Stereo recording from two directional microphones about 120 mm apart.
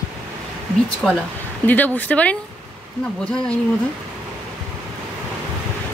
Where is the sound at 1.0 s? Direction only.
Centre (ahead or behind).